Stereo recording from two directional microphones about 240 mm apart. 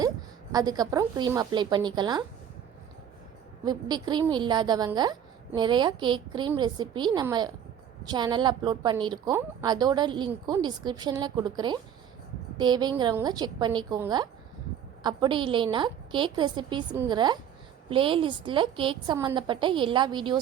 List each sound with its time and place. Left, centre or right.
0.5 s a woman's voice: centre
3.6 s a woman's voice: centre